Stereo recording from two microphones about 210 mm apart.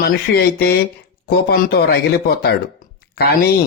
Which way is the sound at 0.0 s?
45° left (ahead or behind).